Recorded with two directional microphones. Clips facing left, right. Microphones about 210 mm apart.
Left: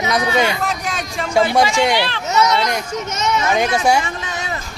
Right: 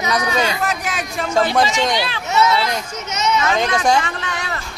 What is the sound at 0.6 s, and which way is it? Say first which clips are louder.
Speech: even; 5° right (ahead or behind).